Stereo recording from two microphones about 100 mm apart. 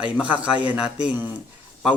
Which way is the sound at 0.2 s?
15° right (ahead or behind).